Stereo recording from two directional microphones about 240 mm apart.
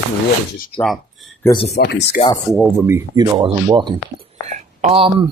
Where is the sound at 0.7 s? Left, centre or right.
Centre.